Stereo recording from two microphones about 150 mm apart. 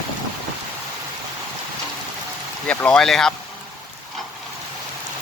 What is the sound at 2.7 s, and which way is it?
Speech, 10° left (ahead or behind).